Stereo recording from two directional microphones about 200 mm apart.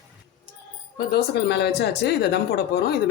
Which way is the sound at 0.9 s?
55° left (ahead or behind).